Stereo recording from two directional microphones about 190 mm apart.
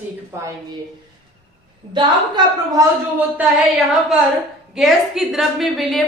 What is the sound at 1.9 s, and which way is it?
Speech, 25° right (ahead or behind).